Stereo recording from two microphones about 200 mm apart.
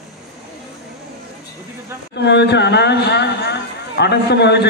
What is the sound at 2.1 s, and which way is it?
Speech, 60° left (ahead or behind).